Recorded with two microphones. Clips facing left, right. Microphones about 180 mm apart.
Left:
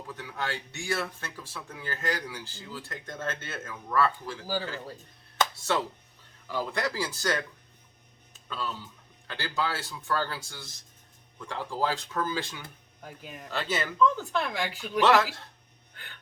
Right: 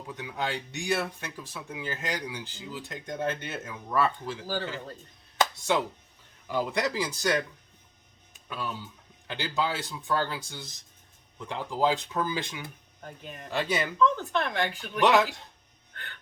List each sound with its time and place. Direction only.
0.1 s speech: 15° right (ahead or behind)
5.4 s a sound: 15° right (ahead or behind)
6.5 s speech: 15° right (ahead or behind)
8.3 s music: 15° right (ahead or behind)
9.2 s speech: 15° right (ahead or behind)
13.1 s speech: 5° left (ahead or behind)
13.5 s speech: 15° right (ahead or behind)
14.0 s speech: 5° left (ahead or behind)
15.0 s speech: 15° right (ahead or behind)